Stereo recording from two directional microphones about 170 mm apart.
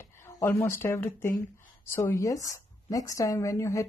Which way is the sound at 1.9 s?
15° left (ahead or behind).